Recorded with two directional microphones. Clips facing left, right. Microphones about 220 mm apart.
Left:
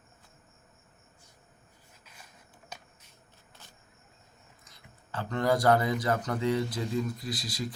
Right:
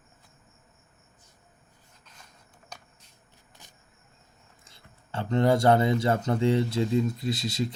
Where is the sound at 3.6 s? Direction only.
15° right (ahead or behind).